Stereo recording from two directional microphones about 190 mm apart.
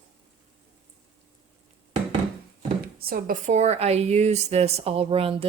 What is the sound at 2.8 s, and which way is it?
Speech, 55° right (ahead or behind).